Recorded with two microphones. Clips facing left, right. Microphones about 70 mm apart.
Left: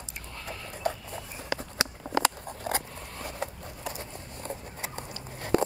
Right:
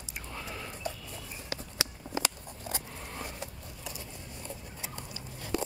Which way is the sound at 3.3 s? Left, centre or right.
Left.